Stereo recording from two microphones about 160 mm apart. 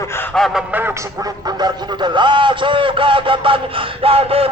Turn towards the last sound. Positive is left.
turn(degrees=-35)  # may be behind; listen again after turning